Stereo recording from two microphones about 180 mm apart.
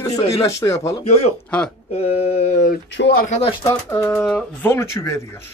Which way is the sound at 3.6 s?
15° left (ahead or behind).